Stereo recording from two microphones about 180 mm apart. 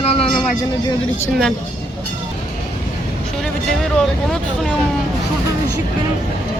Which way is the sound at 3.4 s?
Centre (ahead or behind).